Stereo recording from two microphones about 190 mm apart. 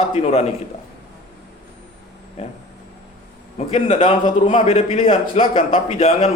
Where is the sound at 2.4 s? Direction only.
35° left (ahead or behind).